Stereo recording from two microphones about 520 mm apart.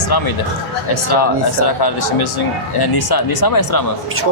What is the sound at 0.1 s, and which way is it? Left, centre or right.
A man's voice, left.